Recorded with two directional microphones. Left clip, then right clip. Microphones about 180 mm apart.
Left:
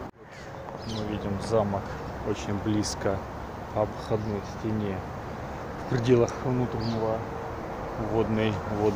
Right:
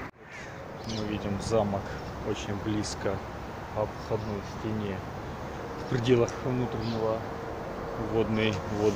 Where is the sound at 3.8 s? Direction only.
45° left (ahead or behind).